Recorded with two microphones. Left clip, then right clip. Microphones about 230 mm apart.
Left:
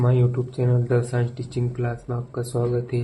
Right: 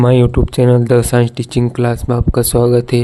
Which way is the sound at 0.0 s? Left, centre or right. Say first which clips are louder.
Right 12 dB; right.